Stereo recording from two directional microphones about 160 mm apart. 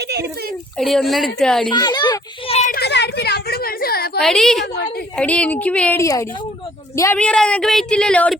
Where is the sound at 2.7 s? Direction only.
90° left; by 4.2 s 75° left (ahead or behind).